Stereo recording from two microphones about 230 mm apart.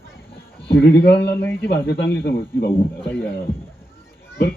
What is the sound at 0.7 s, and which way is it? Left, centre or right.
Speech, left.